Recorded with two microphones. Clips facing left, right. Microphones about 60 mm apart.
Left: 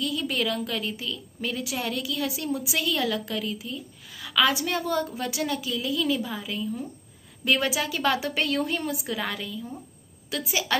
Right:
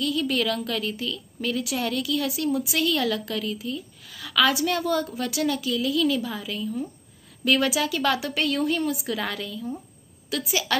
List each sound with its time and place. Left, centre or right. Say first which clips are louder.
0.0 s a woman's voice: right 3 dB; centre